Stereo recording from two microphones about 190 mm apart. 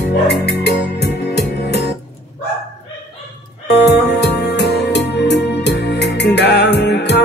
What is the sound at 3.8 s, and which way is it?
Music, 65° left (ahead or behind).